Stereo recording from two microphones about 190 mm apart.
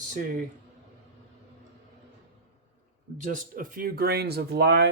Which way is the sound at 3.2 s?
45° right (ahead or behind).